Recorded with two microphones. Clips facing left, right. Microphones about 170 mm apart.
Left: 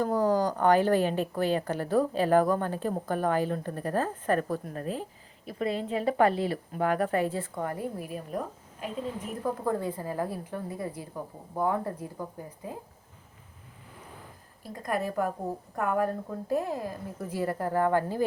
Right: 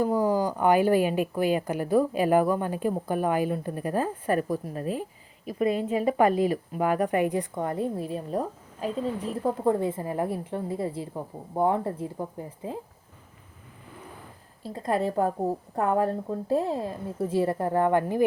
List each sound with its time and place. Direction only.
0.0 s a woman's voice: 10° right (ahead or behind)
14.6 s a woman's voice: 30° right (ahead or behind)